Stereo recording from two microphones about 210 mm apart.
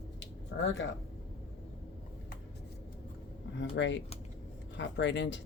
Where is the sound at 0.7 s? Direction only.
60° left (ahead or behind).